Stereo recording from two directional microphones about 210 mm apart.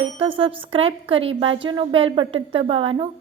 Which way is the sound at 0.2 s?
25° right (ahead or behind).